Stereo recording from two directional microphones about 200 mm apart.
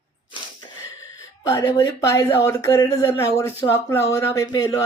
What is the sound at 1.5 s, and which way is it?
Speech, 15° left (ahead or behind).